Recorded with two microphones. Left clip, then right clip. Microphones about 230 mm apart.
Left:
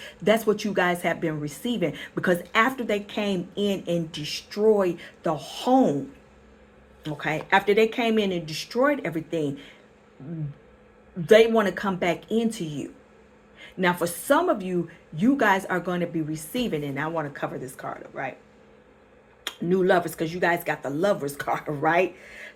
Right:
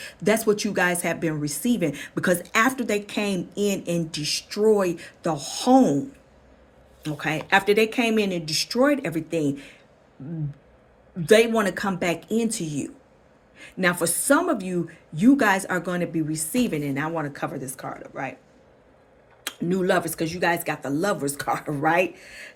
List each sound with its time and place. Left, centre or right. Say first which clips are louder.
0.0 s speech: even; right
7.0 s speech: right 1 dB; right
11.3 s speech: left 1 dB; right
13.6 s a sound: right 1 dB; right
14.0 s speech: even; right
19.6 s speech: left 1 dB; right